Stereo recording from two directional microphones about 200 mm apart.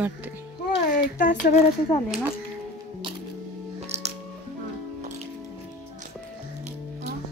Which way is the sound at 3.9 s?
35° right (ahead or behind).